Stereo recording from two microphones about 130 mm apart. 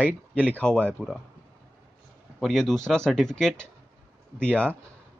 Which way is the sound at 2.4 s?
Centre (ahead or behind).